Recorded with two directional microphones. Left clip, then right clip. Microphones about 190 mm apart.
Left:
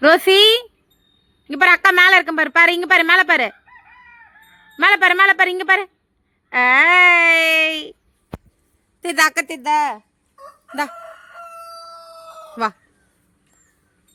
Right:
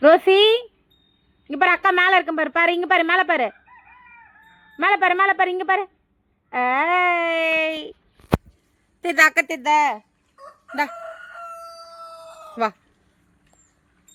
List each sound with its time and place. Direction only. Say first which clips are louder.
0.0 s a woman's voice: left 2 dB; 30° left (ahead or behind)
4.8 s a woman's voice: left 5 dB; 30° left (ahead or behind)
8.3 s a sound: right 14 dB; centre (ahead or behind)
9.0 s a woman's voice: right 1 dB; 10° left (ahead or behind)
10.3 s fowl: even; 10° right (ahead or behind)
12.6 s a woman's voice: left 1 dB; 15° left (ahead or behind)